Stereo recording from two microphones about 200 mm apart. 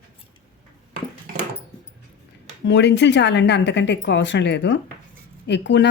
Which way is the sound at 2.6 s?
60° left (ahead or behind).